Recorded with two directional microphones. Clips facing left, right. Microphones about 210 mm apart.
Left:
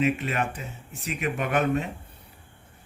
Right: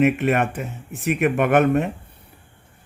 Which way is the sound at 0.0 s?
60° right (ahead or behind).